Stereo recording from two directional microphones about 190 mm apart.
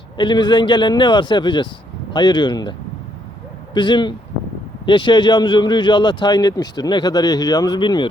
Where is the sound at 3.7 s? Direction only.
25° left (ahead or behind).